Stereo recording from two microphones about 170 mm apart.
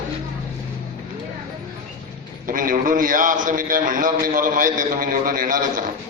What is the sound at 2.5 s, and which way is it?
A man's voice, 50° right (ahead or behind).